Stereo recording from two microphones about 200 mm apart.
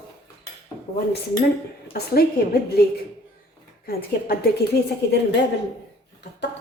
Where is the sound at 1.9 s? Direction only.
50° left (ahead or behind).